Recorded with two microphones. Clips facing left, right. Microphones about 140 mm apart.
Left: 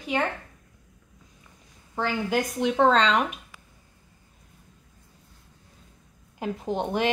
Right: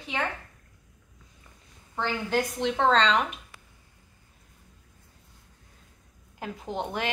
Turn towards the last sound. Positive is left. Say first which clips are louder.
# left 5 dB
turn(degrees=20)  # may be behind; listen again after turning